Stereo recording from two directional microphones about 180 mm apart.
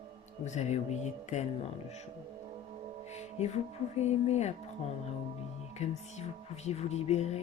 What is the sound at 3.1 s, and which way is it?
Speech, 35° left (ahead or behind).